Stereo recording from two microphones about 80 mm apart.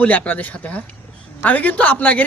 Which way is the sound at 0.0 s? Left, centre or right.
Centre.